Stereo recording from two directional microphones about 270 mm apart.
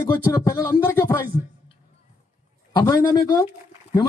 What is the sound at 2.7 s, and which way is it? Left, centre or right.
Speech, centre.